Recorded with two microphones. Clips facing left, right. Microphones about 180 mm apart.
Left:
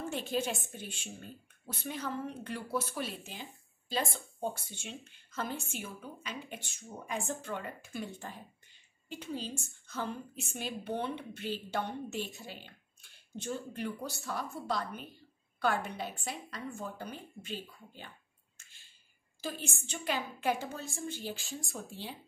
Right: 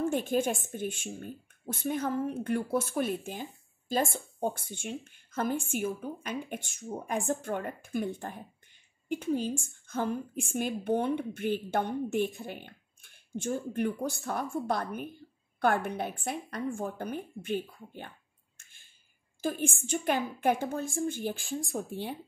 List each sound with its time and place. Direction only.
0.1 s a woman's voice: 50° right (ahead or behind)
18.6 s a sound: 50° right (ahead or behind)
19.4 s a woman's voice: 50° right (ahead or behind)